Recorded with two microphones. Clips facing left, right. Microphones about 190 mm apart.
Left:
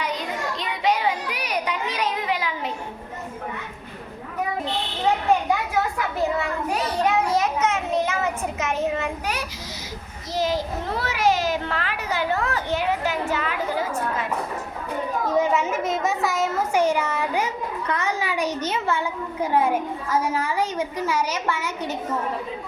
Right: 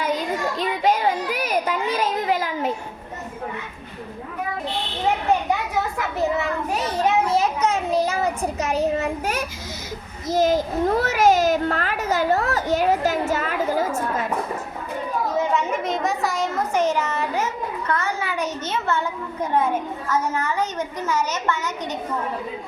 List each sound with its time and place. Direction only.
0.6 s children playing: 45° right (ahead or behind)
7.0 s child singing: 25° right (ahead or behind)
8.5 s a child's voice: 35° right (ahead or behind)
15.5 s speech: centre (ahead or behind)